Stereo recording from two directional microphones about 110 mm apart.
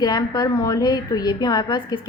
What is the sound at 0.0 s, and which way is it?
A woman's voice, 35° left (ahead or behind).